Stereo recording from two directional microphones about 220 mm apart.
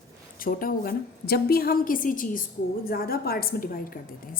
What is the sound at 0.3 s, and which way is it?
A woman's voice, 40° left (ahead or behind).